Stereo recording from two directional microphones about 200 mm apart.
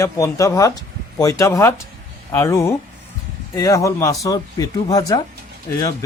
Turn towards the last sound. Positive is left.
turn(degrees=15)  # may be behind; listen again after turning